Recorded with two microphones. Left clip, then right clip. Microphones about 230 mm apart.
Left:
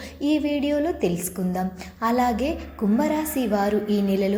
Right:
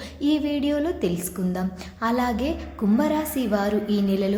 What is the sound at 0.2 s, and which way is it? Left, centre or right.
A woman's voice, centre.